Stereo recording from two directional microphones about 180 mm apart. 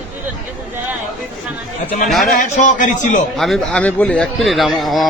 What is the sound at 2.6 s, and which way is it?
Speech, 45° left (ahead or behind).